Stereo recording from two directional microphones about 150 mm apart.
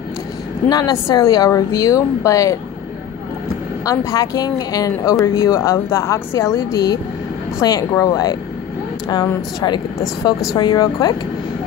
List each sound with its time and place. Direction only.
0.7 s a woman's voice: 25° left (ahead or behind)
3.8 s a woman's voice: 20° left (ahead or behind)